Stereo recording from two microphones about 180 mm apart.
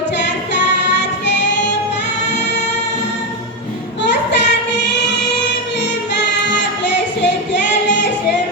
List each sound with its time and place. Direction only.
4.0 s child singing: 75° left (ahead or behind)
6.8 s music: 75° left (ahead or behind)